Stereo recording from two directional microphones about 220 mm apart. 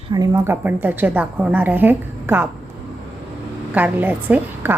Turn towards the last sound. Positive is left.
turn(degrees=-10)  # may be behind; listen again after turning